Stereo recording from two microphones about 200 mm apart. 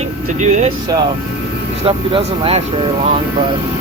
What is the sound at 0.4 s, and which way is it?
Speech, 35° right (ahead or behind).